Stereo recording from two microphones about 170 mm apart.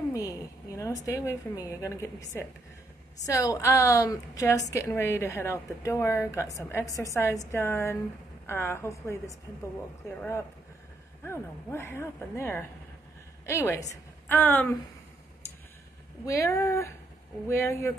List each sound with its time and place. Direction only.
0.1 s a woman's voice: 20° left (ahead or behind)
11.2 s a woman's voice: 15° left (ahead or behind)
16.3 s a woman's voice: 15° left (ahead or behind)